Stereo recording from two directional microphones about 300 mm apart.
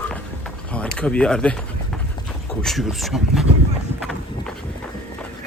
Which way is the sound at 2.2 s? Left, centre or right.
Centre.